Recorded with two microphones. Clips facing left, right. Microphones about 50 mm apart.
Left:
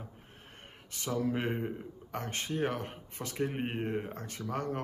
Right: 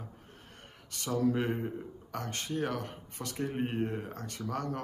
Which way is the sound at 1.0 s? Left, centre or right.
Left.